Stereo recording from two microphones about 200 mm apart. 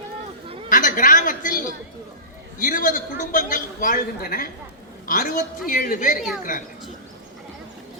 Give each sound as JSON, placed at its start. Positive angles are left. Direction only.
{"t": 0.7, "sound": "chatter", "side_deg": 40}
{"t": 2.6, "sound": "a man's voice", "side_deg": 40}